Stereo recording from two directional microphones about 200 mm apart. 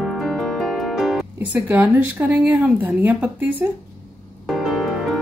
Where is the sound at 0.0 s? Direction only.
Centre (ahead or behind).